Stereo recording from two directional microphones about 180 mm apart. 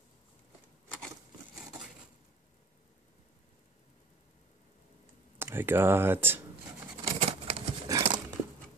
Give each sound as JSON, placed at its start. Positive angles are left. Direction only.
{"t": 5.4, "sound": "speech", "side_deg": -10}
{"t": 7.2, "sound": "a sound", "side_deg": -35}
{"t": 8.0, "sound": "dog", "side_deg": -25}